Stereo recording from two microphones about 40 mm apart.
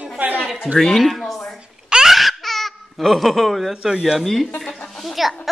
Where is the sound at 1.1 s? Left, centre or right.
Centre.